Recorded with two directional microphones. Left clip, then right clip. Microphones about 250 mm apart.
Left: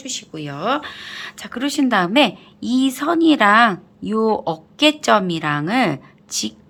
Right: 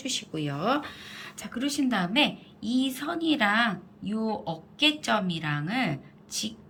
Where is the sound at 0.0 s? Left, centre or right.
Centre.